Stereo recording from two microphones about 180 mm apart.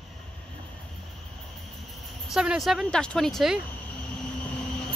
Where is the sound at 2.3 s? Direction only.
5° right (ahead or behind).